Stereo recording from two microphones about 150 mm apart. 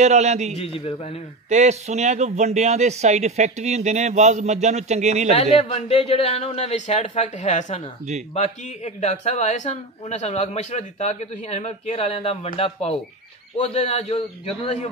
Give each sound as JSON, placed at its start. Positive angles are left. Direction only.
{"t": 0.0, "sound": "speech", "side_deg": -50}
{"t": 0.6, "sound": "a man's voice", "side_deg": 40}
{"t": 1.5, "sound": "speech", "side_deg": -50}
{"t": 5.3, "sound": "a man's voice", "side_deg": 45}